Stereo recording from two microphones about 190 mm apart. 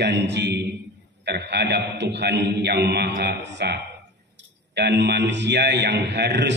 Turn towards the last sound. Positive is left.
turn(degrees=-65)  # may be behind; listen again after turning